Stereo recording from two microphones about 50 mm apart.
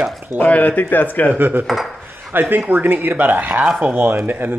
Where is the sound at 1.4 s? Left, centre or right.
Right.